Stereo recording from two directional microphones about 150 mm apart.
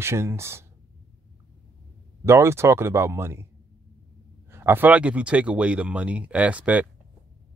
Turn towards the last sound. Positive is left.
turn(degrees=-10)  # may be behind; listen again after turning